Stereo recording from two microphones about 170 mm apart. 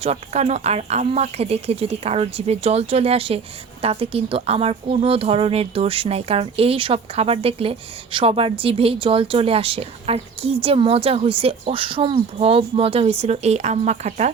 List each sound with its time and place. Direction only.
0.0 s speech: 40° right (ahead or behind)